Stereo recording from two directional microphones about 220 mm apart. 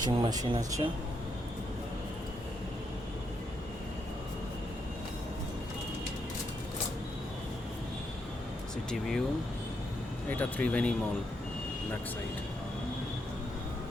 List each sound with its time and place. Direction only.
0.0 s speech: 15° right (ahead or behind)
8.9 s speech: centre (ahead or behind)
10.2 s speech: 5° left (ahead or behind)